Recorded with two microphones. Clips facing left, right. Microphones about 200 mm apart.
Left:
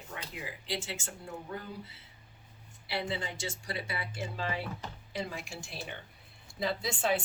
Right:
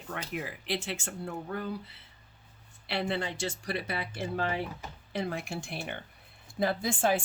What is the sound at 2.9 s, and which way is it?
Speech, 65° right (ahead or behind).